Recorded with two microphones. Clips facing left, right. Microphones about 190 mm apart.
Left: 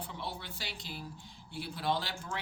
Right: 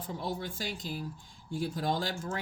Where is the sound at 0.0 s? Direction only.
45° right (ahead or behind).